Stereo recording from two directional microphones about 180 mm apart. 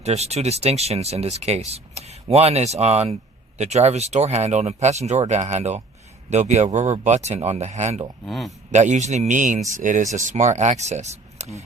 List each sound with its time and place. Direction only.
0.0 s speech: 35° right (ahead or behind)
8.2 s speech: centre (ahead or behind)
8.7 s speech: 40° right (ahead or behind)